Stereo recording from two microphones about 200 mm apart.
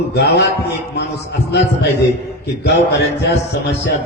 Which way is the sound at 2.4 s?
55° left (ahead or behind).